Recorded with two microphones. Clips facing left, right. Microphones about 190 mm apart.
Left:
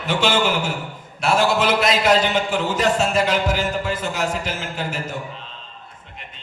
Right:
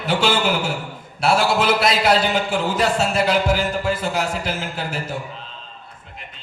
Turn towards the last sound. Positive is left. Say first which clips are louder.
# right 1 dB
turn(degrees=-35)  # may be behind; listen again after turning